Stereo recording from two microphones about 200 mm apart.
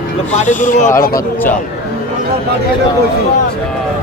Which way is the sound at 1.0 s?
45° left (ahead or behind).